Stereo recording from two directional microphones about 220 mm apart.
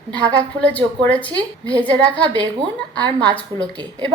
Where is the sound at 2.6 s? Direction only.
20° right (ahead or behind).